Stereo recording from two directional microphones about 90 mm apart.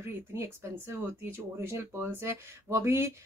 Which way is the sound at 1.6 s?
25° right (ahead or behind).